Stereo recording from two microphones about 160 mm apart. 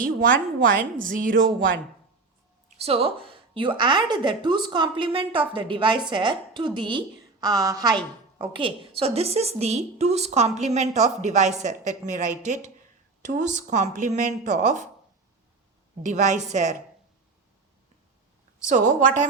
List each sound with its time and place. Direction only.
0.0 s a woman's voice: 60° right (ahead or behind)
2.7 s a woman's voice: 40° right (ahead or behind); by 7.9 s 20° right (ahead or behind)
8.4 s a woman's voice: 35° right (ahead or behind); by 14.8 s 50° right (ahead or behind)
16.0 s a woman's voice: 50° right (ahead or behind)
18.6 s a woman's voice: 55° right (ahead or behind)